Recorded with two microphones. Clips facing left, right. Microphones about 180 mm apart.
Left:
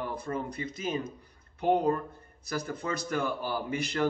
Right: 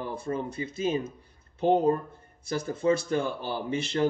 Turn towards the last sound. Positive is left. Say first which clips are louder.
# right 3 dB
turn(degrees=-25)  # may be behind; listen again after turning